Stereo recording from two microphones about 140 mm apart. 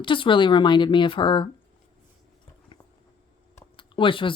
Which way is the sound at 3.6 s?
35° left (ahead or behind).